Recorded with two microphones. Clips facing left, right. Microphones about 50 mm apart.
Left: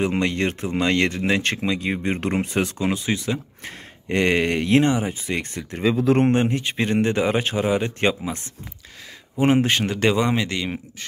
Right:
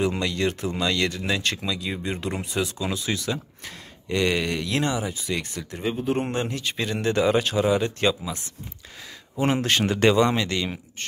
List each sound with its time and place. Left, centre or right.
0.0 s speech: left
2.9 s speech: left
5.8 s speech: left
6.3 s speech: left
9.4 s speech: left
9.7 s speech: centre
10.1 s speech: centre